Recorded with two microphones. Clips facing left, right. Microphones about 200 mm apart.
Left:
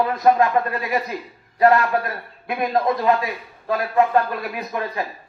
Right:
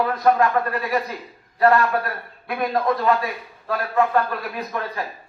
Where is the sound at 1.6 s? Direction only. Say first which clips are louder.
Left 1 dB; 20° left (ahead or behind).